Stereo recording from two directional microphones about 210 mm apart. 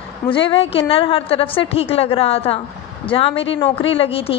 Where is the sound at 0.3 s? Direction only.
25° left (ahead or behind).